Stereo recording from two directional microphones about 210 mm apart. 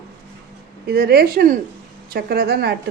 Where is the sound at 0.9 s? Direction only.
50° right (ahead or behind).